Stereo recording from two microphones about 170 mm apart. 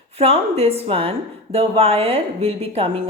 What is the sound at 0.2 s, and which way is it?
Speech, 35° right (ahead or behind).